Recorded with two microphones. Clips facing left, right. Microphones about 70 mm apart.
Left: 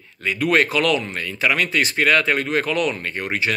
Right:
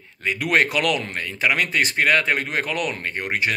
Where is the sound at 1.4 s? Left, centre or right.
Right.